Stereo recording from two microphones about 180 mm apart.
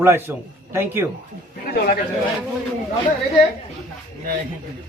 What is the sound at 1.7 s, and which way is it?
Speech, 55° left (ahead or behind).